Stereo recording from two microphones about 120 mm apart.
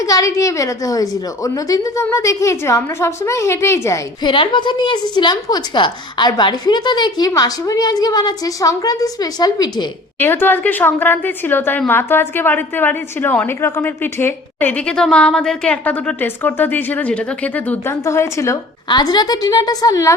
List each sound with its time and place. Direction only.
0.0 s a woman's voice: 25° left (ahead or behind)
4.2 s a woman's voice: 40° left (ahead or behind)
10.2 s a woman's voice: 15° left (ahead or behind)
18.0 s a woman's voice: 25° left (ahead or behind)
18.9 s a woman's voice: 35° left (ahead or behind)